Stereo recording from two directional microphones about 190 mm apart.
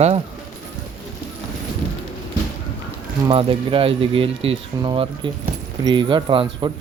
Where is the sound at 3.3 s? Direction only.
25° right (ahead or behind).